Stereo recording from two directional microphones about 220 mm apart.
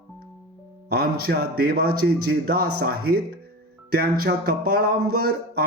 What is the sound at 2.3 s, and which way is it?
Speech, 45° right (ahead or behind).